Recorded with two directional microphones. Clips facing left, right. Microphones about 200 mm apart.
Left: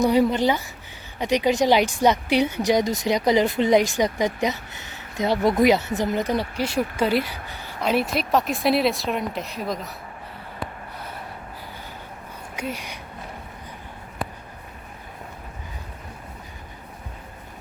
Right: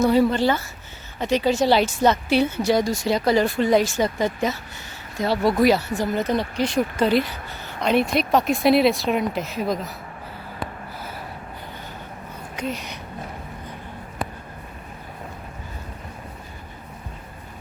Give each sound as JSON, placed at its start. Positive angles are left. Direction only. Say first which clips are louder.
{"t": 0.0, "sound": "speech", "louder": "right 1 dB", "side_deg": 15}
{"t": 12.5, "sound": "speech", "louder": "right 2 dB", "side_deg": 10}